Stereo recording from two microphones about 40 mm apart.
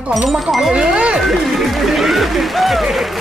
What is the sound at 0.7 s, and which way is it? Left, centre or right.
Speech, right.